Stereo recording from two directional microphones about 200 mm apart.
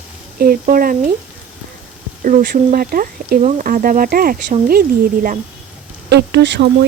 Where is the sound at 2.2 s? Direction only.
45° right (ahead or behind).